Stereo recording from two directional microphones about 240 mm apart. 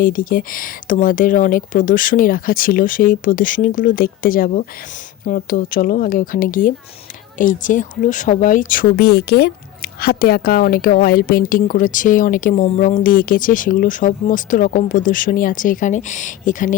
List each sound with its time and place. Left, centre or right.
0.0 s speech: left